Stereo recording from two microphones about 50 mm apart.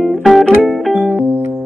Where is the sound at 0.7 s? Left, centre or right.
Centre.